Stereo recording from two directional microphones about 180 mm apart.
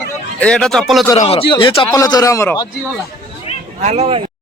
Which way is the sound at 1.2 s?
30° left (ahead or behind).